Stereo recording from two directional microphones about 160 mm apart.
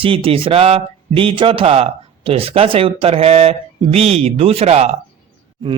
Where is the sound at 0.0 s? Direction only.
35° right (ahead or behind).